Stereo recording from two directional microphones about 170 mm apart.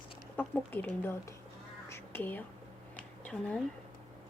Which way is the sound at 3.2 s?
5° left (ahead or behind).